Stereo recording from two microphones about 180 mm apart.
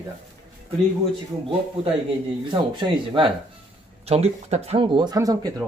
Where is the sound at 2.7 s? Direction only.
25° right (ahead or behind).